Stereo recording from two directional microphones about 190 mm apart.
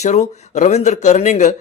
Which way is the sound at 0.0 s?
40° left (ahead or behind).